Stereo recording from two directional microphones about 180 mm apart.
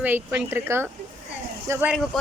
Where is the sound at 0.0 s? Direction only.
10° right (ahead or behind).